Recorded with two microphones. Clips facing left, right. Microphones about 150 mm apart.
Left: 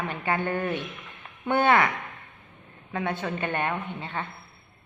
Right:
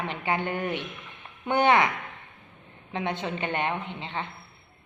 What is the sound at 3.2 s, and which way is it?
A woman's voice, 20° right (ahead or behind).